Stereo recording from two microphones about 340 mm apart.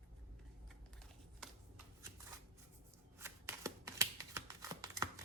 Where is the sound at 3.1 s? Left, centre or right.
Centre.